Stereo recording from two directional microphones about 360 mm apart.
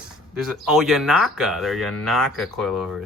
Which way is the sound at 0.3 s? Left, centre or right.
Centre.